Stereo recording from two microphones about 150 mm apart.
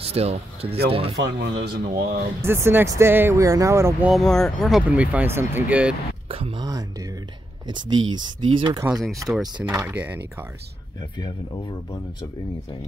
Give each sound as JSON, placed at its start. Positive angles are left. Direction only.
{"t": 0.0, "sound": "speech", "side_deg": -40}
{"t": 1.1, "sound": "speech", "side_deg": -90}
{"t": 2.4, "sound": "speech", "side_deg": -15}
{"t": 4.1, "sound": "speech", "side_deg": 5}
{"t": 6.2, "sound": "speech", "side_deg": -40}
{"t": 6.6, "sound": "speech", "side_deg": -25}
{"t": 9.3, "sound": "speech", "side_deg": -5}
{"t": 11.0, "sound": "speech", "side_deg": 30}